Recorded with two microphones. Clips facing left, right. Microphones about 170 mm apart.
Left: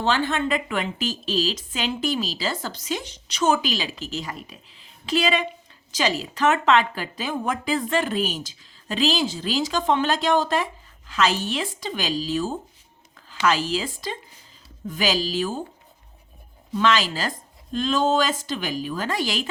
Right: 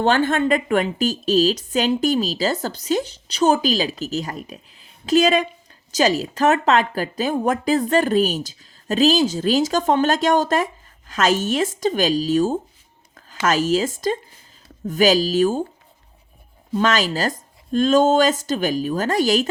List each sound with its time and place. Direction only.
0.0 s speech: 50° right (ahead or behind)
16.7 s speech: 45° right (ahead or behind)